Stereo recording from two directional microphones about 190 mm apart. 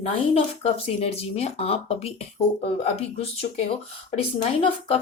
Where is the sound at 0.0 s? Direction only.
30° left (ahead or behind).